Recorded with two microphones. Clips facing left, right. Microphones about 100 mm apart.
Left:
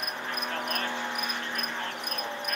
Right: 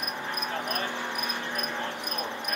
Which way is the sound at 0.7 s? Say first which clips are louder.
Right 1 dB; 15° right (ahead or behind).